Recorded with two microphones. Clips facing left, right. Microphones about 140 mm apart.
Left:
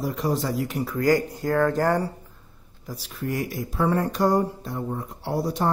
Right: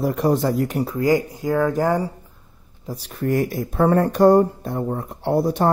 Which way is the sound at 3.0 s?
50° right (ahead or behind).